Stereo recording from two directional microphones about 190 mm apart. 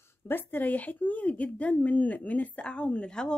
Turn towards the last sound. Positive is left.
turn(degrees=5)  # may be behind; listen again after turning